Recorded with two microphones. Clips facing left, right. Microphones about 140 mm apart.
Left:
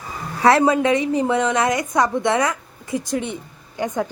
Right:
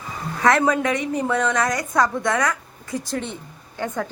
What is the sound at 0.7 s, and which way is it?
A woman's voice, 25° left (ahead or behind).